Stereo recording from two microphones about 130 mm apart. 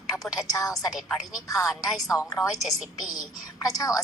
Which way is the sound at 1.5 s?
Centre (ahead or behind).